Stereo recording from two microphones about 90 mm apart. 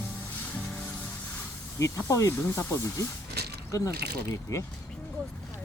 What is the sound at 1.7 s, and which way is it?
Speech, 35° left (ahead or behind).